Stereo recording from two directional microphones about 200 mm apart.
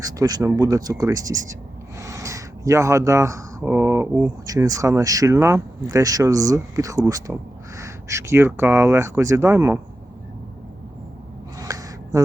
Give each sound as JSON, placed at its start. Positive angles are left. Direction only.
{"t": 0.0, "sound": "speech", "side_deg": -20}
{"t": 11.6, "sound": "gasp", "side_deg": -15}